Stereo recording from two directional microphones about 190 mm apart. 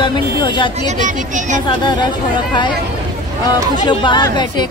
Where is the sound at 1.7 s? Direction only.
25° left (ahead or behind).